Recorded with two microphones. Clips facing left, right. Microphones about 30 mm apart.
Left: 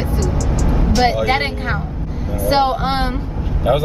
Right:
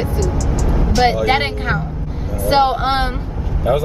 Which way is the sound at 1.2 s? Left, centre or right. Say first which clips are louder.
Right 1 dB; centre.